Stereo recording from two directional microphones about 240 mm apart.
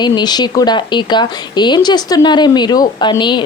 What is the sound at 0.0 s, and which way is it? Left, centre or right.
Speech, centre.